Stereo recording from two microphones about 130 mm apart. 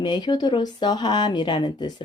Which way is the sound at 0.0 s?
35° left (ahead or behind).